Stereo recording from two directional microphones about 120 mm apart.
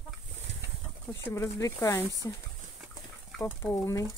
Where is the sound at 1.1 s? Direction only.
20° left (ahead or behind).